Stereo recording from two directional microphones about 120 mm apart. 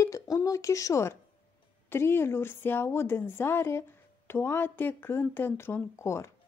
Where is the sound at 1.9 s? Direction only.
20° left (ahead or behind).